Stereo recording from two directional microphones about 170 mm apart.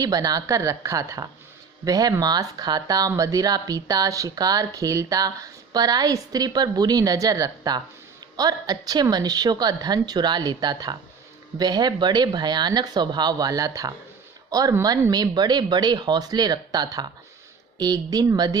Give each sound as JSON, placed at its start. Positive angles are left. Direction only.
{"t": 0.0, "sound": "speech", "side_deg": -20}